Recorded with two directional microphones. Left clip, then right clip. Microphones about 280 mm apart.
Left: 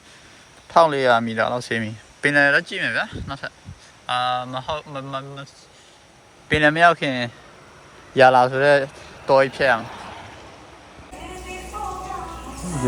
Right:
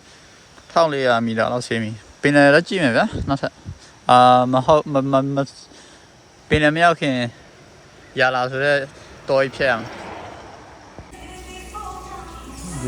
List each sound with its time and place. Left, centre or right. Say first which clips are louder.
0.7 s speech: left 1 dB; centre
6.5 s speech: even; centre